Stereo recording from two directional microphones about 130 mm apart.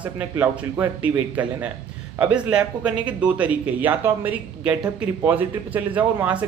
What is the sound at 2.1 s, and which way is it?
Speech, 10° right (ahead or behind).